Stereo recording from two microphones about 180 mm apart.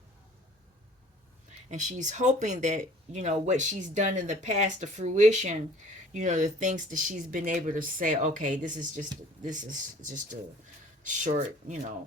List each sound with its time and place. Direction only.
1.7 s speech: 40° right (ahead or behind)